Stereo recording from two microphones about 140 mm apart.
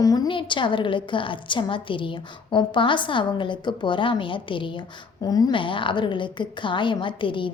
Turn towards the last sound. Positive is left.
turn(degrees=35)  # may be behind; listen again after turning